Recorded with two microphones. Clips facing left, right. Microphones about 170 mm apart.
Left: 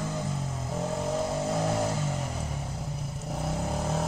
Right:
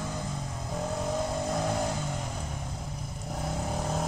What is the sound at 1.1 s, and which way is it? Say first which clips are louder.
Vehicle: left 2 dB; 5° left (ahead or behind).